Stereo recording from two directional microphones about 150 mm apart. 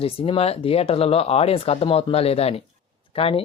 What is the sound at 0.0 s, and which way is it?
Speech, 40° left (ahead or behind).